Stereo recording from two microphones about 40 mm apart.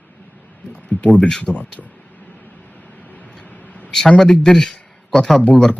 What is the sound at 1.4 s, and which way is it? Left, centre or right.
Speech, left.